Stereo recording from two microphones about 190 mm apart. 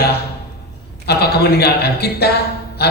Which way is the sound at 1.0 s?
55° left (ahead or behind).